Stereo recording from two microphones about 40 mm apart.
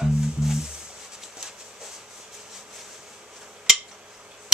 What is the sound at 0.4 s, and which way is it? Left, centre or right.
Music, centre.